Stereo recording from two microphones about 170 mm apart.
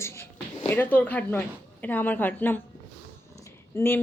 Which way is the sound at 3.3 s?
15° left (ahead or behind).